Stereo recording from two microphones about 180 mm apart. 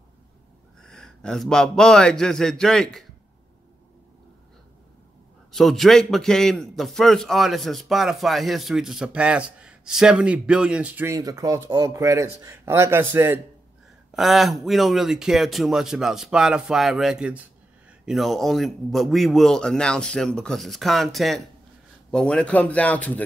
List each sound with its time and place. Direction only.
0.8 s a man's voice: 5° left (ahead or behind)
5.5 s a man's voice: centre (ahead or behind)
14.1 s a man's voice: centre (ahead or behind)